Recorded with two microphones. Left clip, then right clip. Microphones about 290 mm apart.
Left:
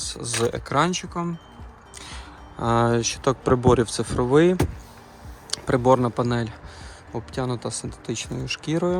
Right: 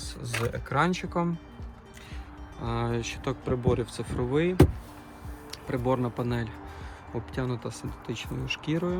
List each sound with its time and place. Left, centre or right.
0.0 s speech: centre
2.6 s speech: left